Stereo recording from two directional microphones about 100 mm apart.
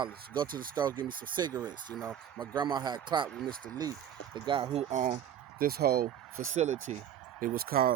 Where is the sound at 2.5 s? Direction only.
45° right (ahead or behind).